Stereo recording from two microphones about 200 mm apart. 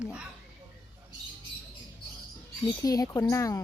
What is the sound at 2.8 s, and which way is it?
Speech, 20° left (ahead or behind).